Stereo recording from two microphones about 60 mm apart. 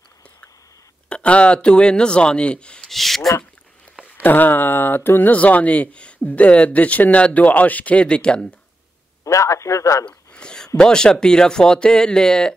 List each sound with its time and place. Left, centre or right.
1.0 s speech: centre
2.9 s speech: centre
4.0 s a sound: left
5.3 s speech: left
9.2 s a man's voice: left
10.0 s a sound: centre
10.8 s speech: centre